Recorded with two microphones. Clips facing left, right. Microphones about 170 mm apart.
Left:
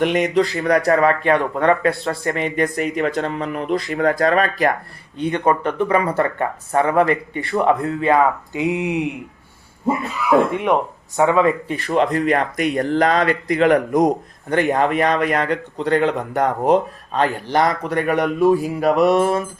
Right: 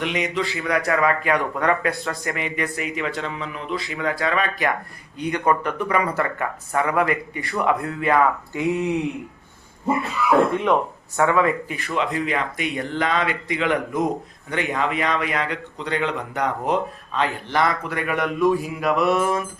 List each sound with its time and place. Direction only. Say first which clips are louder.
0.0 s a man's voice: left 7 dB; 50° left (ahead or behind)
5.1 s speech: left 3 dB; 25° left (ahead or behind)
11.2 s speech: left 3 dB; 20° left (ahead or behind)
11.7 s a man's voice: left 7 dB; 35° left (ahead or behind)
12.1 s a man's voice: left 6 dB; 50° left (ahead or behind)